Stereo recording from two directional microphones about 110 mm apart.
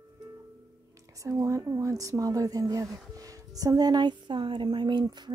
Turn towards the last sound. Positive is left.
turn(degrees=-40)  # may be behind; listen again after turning